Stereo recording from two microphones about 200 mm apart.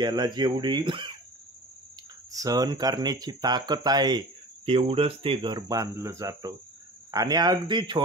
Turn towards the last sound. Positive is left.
turn(degrees=-25)  # may be behind; listen again after turning